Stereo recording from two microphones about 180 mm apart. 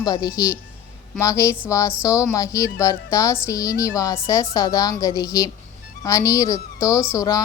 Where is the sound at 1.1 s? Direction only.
15° left (ahead or behind).